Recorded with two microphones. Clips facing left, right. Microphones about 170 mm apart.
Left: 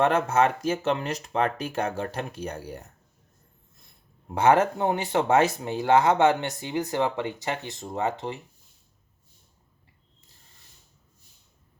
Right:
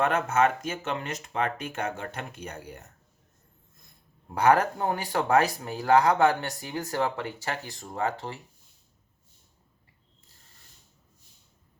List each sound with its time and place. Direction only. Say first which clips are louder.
0.0 s speech: left 2 dB; 30° left (ahead or behind)
4.3 s speech: left 2 dB; 25° left (ahead or behind)